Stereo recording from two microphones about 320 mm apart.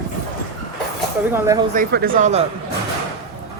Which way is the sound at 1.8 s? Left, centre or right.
Right.